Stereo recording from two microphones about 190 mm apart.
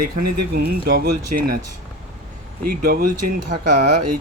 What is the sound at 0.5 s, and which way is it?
Speech, 55° right (ahead or behind).